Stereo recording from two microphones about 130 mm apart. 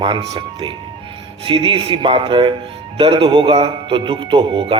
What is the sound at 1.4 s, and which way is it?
A man's voice, 40° right (ahead or behind).